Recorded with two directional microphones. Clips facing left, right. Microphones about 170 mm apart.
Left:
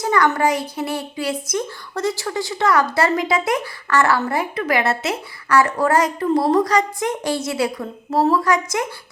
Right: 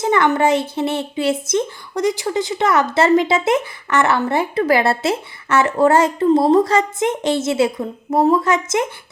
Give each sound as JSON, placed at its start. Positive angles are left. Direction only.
{"t": 0.0, "sound": "speech", "side_deg": -20}